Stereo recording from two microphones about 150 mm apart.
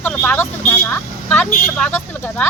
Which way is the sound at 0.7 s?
15° left (ahead or behind).